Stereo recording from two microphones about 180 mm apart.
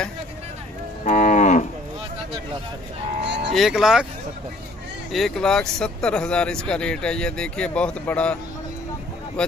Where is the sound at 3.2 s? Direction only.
75° right (ahead or behind).